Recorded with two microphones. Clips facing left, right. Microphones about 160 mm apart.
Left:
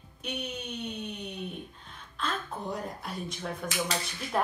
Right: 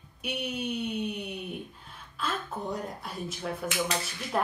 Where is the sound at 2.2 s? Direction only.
Centre (ahead or behind).